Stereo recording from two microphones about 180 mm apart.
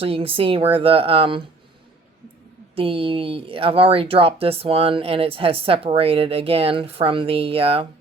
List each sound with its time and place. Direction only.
0.0 s speech: 30° right (ahead or behind)
2.7 s speech: 30° right (ahead or behind)